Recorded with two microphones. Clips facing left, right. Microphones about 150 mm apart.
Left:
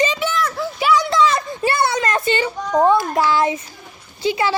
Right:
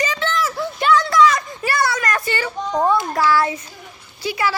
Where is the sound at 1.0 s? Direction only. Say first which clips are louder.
Right 1 dB; 25° left (ahead or behind).